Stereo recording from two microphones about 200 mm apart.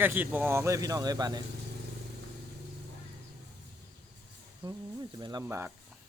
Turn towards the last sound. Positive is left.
turn(degrees=-15)  # may be behind; listen again after turning